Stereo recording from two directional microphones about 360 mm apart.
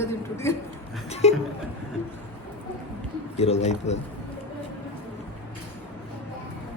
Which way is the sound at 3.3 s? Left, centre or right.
Centre.